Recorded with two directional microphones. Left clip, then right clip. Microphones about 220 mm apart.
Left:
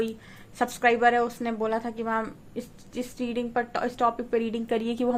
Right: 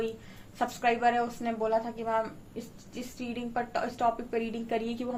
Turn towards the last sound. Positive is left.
turn(degrees=45)  # may be behind; listen again after turning